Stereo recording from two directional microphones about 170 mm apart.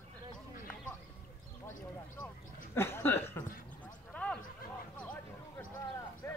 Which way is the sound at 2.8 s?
15° left (ahead or behind).